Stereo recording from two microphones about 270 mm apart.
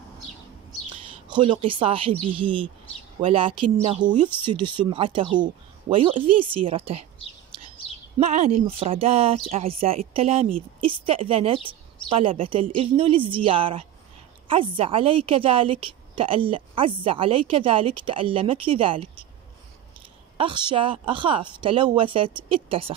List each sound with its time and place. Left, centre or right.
1.3 s a woman's voice: centre
8.2 s a woman's voice: right
20.3 s a woman's voice: centre